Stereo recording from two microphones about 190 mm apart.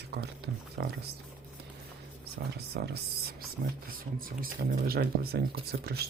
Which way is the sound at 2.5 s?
60° right (ahead or behind).